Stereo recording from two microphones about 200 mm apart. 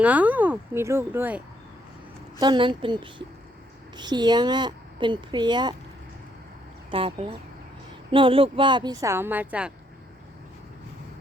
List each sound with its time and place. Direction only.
0.0 s speech: 5° right (ahead or behind)
2.4 s a woman's voice: 25° right (ahead or behind)
6.9 s a woman's voice: 30° right (ahead or behind); by 9.7 s 5° right (ahead or behind)